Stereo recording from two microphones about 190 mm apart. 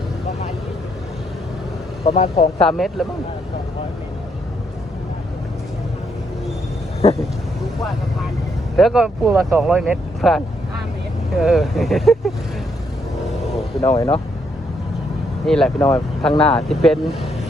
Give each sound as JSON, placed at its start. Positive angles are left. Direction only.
{"t": 2.0, "sound": "speech", "side_deg": 35}
{"t": 2.6, "sound": "speech", "side_deg": 0}
{"t": 7.0, "sound": "speech", "side_deg": 35}
{"t": 8.7, "sound": "speech", "side_deg": 0}
{"t": 9.3, "sound": "speech", "side_deg": -15}
{"t": 13.8, "sound": "speech", "side_deg": 15}
{"t": 15.4, "sound": "speech", "side_deg": 5}